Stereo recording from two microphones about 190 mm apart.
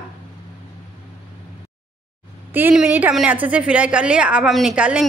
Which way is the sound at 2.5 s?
10° right (ahead or behind).